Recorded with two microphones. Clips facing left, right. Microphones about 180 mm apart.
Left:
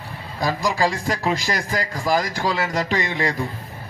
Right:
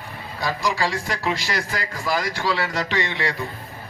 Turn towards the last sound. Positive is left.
turn(degrees=40)  # may be behind; listen again after turning